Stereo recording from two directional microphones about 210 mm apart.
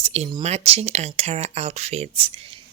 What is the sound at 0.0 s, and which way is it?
Speech, 30° right (ahead or behind).